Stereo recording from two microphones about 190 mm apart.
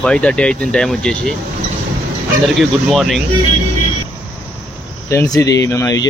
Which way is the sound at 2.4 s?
Centre (ahead or behind).